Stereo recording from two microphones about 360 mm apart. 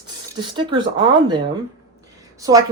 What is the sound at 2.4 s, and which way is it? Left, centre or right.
Speech, centre.